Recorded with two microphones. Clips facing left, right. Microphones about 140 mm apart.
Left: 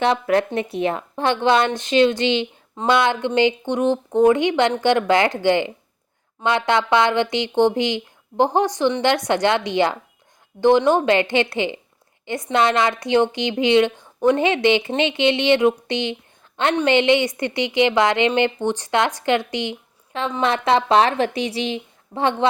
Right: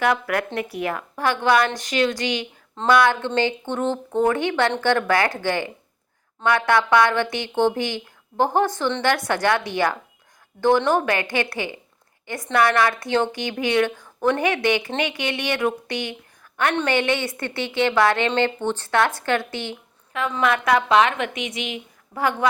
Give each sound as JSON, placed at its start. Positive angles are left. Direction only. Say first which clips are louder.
{"t": 0.0, "sound": "a woman's voice", "louder": "left 4 dB", "side_deg": 25}
{"t": 20.1, "sound": "a woman's voice", "louder": "left 1 dB", "side_deg": 30}